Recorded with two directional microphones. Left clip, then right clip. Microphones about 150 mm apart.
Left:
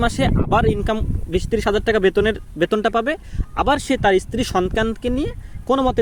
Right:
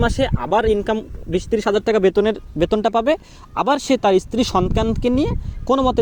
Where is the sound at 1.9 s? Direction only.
15° right (ahead or behind).